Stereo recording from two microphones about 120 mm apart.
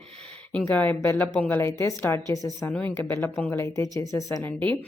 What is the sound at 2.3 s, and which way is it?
Speech, 30° left (ahead or behind).